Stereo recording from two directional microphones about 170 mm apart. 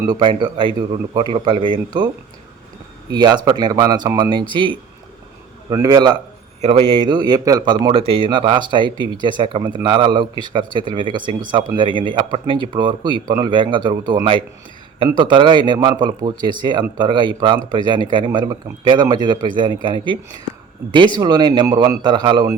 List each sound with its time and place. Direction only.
0.1 s a man's voice: 30° right (ahead or behind)
3.1 s a man's voice: 25° right (ahead or behind)
6.6 s a man's voice: 35° right (ahead or behind)
21.2 s a man's voice: 25° right (ahead or behind)